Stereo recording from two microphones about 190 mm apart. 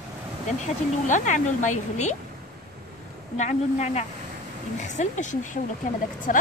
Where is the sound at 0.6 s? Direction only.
40° left (ahead or behind).